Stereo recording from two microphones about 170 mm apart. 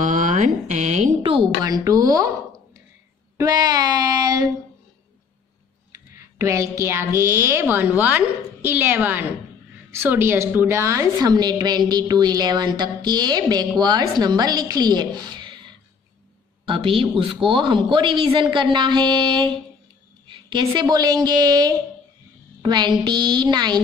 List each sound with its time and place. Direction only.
0.0 s speech: 50° right (ahead or behind)
1.3 s a woman's voice: 25° right (ahead or behind)
3.3 s child singing: 20° right (ahead or behind)
5.9 s a woman's voice: 15° right (ahead or behind)
16.6 s a woman's voice: 30° right (ahead or behind)